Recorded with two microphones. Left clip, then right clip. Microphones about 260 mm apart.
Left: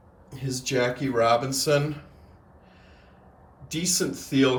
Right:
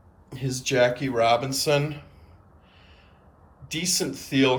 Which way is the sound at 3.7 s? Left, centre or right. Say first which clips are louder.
Even; centre.